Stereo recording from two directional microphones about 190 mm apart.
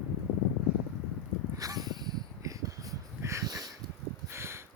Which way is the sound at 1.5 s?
20° right (ahead or behind).